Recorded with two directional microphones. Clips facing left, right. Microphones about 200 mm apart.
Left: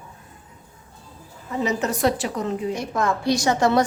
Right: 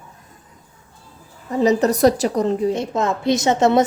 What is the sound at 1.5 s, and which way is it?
A woman's voice, 35° right (ahead or behind).